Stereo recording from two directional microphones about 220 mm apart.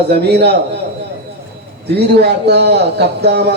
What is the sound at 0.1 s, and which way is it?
Speech, 50° right (ahead or behind).